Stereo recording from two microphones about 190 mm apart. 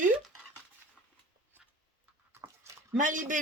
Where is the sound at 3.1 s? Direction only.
45° right (ahead or behind).